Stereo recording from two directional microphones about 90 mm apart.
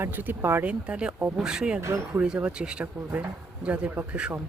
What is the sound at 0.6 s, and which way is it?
Speech, 10° right (ahead or behind).